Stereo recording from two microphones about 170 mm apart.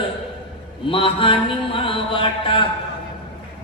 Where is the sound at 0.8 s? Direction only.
30° left (ahead or behind).